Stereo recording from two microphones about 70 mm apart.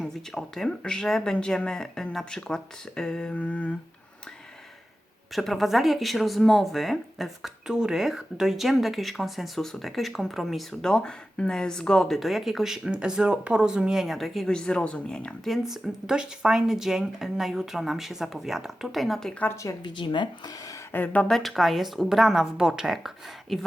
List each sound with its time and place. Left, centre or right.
0.0 s speech: centre
5.3 s speech: centre
15.4 s speech: centre
19.6 s speech: left
20.9 s speech: left
21.2 s speech: centre